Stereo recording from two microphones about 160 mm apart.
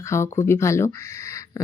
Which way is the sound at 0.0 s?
15° left (ahead or behind).